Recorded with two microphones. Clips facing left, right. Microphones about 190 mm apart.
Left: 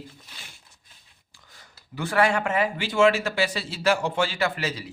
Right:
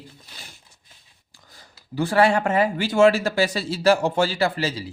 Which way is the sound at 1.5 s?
35° right (ahead or behind).